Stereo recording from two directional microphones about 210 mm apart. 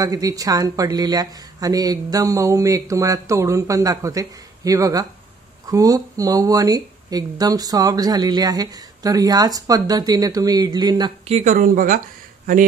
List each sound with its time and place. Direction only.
0.0 s speech: 15° right (ahead or behind)
11.3 s speech: 40° right (ahead or behind)